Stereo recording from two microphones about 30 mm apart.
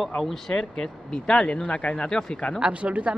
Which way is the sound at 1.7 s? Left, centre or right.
Left.